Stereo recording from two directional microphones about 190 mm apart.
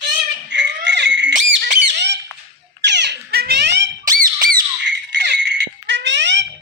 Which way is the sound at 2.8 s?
65° right (ahead or behind).